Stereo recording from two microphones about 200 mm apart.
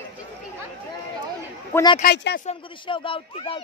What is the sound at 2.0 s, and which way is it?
Speech, 55° left (ahead or behind).